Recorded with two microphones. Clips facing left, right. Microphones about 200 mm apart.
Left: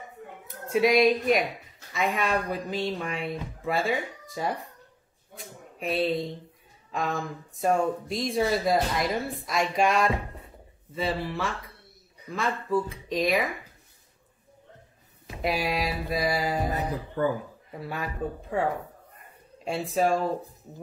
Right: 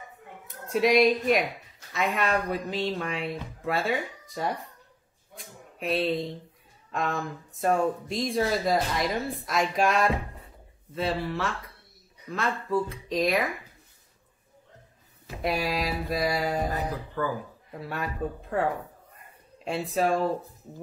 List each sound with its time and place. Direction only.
0.5 s speech: centre (ahead or behind)
5.8 s speech: centre (ahead or behind)
15.4 s speech: centre (ahead or behind)
16.7 s speech: 25° left (ahead or behind)
17.7 s speech: centre (ahead or behind)
19.9 s speech: centre (ahead or behind)